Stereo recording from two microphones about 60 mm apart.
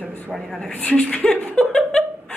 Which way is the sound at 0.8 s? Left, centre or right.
Centre.